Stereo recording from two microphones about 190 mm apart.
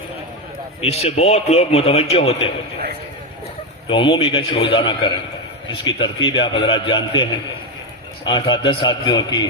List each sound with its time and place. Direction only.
0.8 s a man's voice: 35° left (ahead or behind)
3.8 s a man's voice: 25° left (ahead or behind)